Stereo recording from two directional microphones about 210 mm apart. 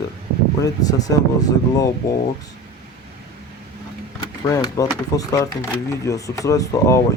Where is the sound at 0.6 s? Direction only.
15° left (ahead or behind).